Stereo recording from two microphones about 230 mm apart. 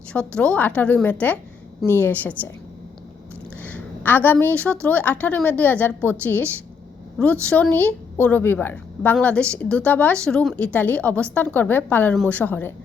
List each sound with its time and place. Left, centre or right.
0.1 s a woman's voice: centre
3.6 s a woman's voice: centre